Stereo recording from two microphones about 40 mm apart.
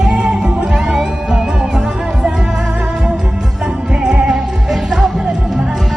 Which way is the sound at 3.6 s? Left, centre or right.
Right.